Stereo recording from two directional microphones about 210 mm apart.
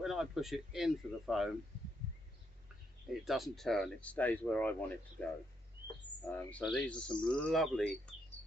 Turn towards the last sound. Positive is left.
turn(degrees=0)  # may be behind; listen again after turning